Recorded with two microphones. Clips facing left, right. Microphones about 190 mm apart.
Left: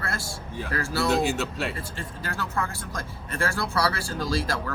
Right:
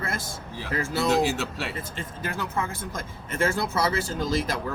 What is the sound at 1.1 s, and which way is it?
Speech, centre (ahead or behind).